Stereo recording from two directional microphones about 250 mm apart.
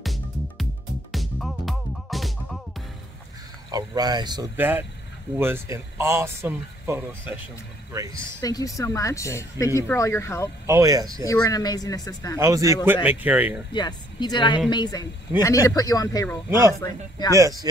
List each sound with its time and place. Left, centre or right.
0.0 s music: centre
3.7 s speech: centre
8.4 s speech: centre
10.7 s speech: centre
11.2 s speech: centre
12.4 s speech: centre
13.7 s speech: centre
16.4 s speech: centre